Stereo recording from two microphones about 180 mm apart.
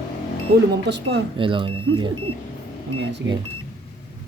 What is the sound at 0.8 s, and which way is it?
Speech, 75° right (ahead or behind).